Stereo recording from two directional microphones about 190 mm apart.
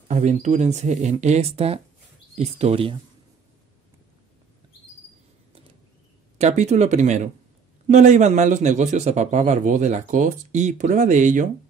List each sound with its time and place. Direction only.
0.1 s a man's voice: 40° right (ahead or behind)
6.3 s a man's voice: 35° right (ahead or behind)